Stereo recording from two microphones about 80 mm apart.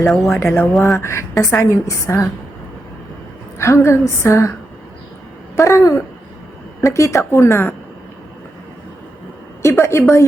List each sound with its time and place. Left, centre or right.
0.0 s speech: centre
0.9 s speech: left
3.6 s speech: left
5.5 s speech: left
9.6 s a woman's voice: left